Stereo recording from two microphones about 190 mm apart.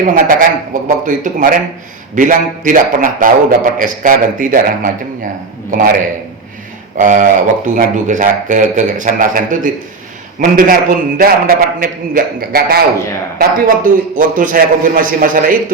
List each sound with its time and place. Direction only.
0.0 s speech: 45° right (ahead or behind)